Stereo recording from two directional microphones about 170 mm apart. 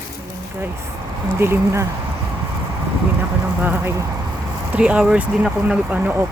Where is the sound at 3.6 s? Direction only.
10° right (ahead or behind).